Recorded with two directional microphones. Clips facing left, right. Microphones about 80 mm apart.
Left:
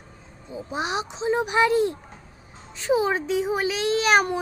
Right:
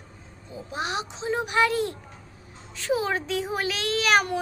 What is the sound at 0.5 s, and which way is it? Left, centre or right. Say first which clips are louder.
Speech: left 3 dB; left.